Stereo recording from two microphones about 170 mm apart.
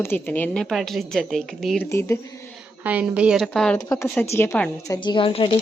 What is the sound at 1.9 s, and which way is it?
Speech, 15° left (ahead or behind).